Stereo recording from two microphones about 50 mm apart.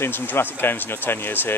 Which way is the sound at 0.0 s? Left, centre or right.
Left.